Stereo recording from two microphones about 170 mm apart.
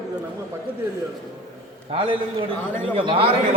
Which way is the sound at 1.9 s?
35° right (ahead or behind).